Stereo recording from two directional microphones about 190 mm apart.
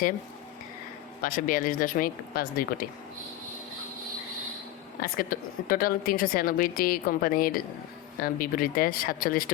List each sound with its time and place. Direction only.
1.2 s a woman's voice: 45° left (ahead or behind)
4.9 s a woman's voice: 50° left (ahead or behind)